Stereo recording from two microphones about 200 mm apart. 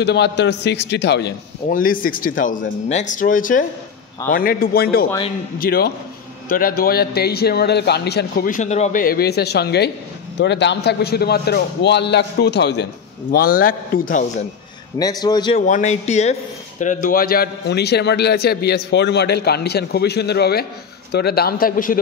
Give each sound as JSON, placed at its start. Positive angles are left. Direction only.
{"t": 0.0, "sound": "a man's voice", "side_deg": 55}
{"t": 1.7, "sound": "a man's voice", "side_deg": 45}
{"t": 13.3, "sound": "a man's voice", "side_deg": 45}
{"t": 15.0, "sound": "a man's voice", "side_deg": 20}
{"t": 15.5, "sound": "a man's voice", "side_deg": 35}